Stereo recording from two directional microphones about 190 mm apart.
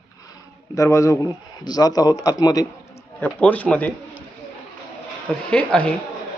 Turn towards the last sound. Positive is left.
turn(degrees=5)  # may be behind; listen again after turning